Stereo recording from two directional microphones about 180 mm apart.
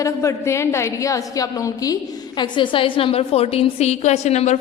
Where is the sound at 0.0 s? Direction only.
15° left (ahead or behind).